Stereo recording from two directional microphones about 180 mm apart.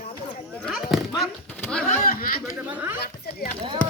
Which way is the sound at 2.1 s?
55° left (ahead or behind).